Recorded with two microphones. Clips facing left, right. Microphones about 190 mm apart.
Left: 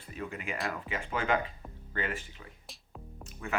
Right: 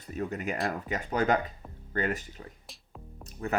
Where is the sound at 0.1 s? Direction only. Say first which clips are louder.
Right 6 dB; 40° right (ahead or behind).